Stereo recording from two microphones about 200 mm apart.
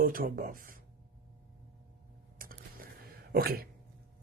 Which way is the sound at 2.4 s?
45° right (ahead or behind).